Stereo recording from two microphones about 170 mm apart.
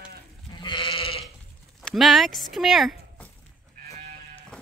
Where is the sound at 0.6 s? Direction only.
30° left (ahead or behind).